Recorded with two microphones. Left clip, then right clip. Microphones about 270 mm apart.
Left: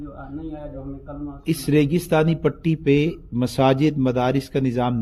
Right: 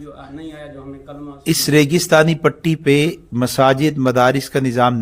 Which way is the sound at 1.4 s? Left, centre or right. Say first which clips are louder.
Right 6 dB; right.